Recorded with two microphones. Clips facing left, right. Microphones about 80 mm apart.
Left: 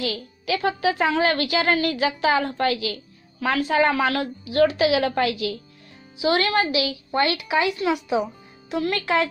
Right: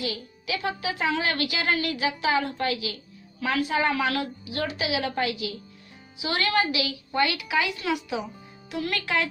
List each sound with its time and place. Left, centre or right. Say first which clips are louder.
0.0 s a woman's voice: left 4 dB; left
4.6 s a woman's voice: left 10 dB; left
6.2 s a woman's voice: left 4 dB; left